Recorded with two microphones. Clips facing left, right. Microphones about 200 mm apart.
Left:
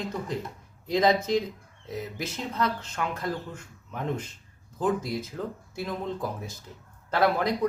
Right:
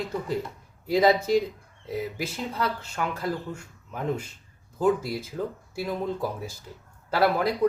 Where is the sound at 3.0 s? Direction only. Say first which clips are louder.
Right 2 dB; 5° right (ahead or behind).